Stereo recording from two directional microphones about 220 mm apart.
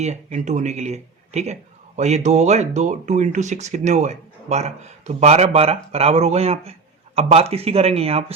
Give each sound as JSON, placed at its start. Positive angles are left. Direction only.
{"t": 0.0, "sound": "speech", "side_deg": -30}